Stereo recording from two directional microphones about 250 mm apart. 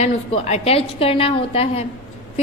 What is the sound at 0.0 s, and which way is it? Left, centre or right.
A woman's voice, left.